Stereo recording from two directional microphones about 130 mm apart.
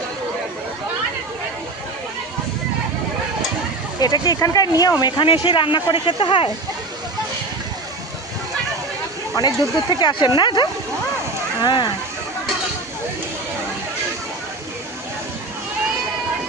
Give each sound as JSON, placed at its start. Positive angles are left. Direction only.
{"t": 4.0, "sound": "speech", "side_deg": 30}
{"t": 9.4, "sound": "speech", "side_deg": 30}